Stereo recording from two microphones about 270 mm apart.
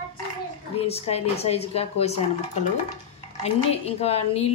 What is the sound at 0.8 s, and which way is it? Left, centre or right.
A woman's voice, left.